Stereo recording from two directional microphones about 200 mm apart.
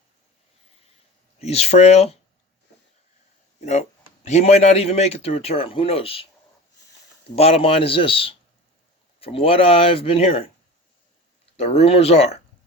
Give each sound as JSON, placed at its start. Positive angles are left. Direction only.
{"t": 1.4, "sound": "speech", "side_deg": 30}
{"t": 3.6, "sound": "speech", "side_deg": 35}
{"t": 7.3, "sound": "speech", "side_deg": 30}
{"t": 11.5, "sound": "speech", "side_deg": 30}